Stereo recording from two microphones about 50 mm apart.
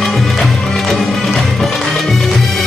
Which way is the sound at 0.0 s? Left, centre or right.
Centre.